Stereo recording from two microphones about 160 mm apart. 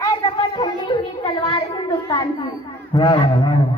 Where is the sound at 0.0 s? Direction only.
25° left (ahead or behind).